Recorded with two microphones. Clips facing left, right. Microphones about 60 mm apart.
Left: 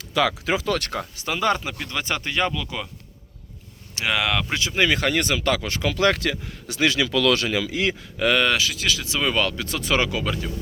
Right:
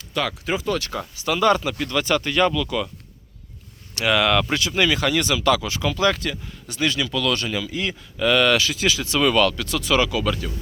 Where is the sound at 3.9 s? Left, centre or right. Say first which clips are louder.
Right 4 dB; centre.